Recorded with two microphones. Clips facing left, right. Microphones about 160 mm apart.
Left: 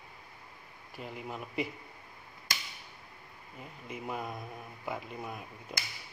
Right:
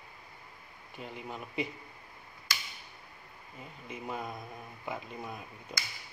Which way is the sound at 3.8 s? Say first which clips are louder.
Left 1 dB; centre (ahead or behind).